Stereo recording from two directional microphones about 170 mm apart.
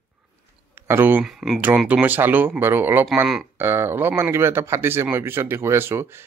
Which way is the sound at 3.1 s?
Centre (ahead or behind).